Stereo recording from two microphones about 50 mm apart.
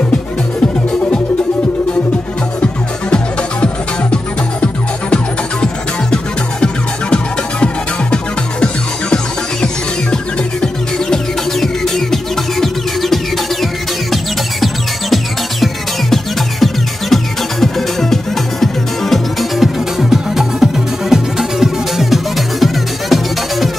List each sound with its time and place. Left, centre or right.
3.6 s music: centre
11.6 s music: centre